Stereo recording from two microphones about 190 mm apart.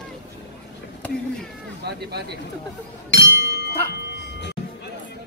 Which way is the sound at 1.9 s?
60° right (ahead or behind).